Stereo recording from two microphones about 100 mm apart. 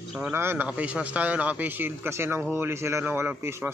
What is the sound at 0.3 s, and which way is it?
A man's voice, 25° right (ahead or behind).